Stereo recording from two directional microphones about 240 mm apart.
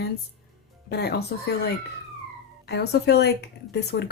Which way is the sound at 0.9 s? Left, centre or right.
Left.